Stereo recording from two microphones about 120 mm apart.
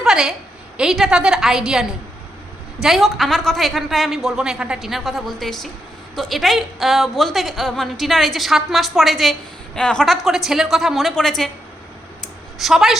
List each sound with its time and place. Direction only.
0.0 s a sound: 5° right (ahead or behind)
0.8 s a woman's voice: centre (ahead or behind)
12.5 s a woman's voice: centre (ahead or behind)